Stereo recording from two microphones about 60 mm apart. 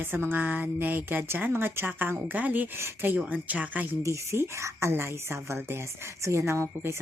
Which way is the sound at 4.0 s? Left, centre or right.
Right.